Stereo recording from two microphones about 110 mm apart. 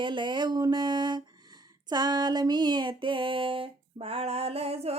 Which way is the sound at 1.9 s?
40° right (ahead or behind).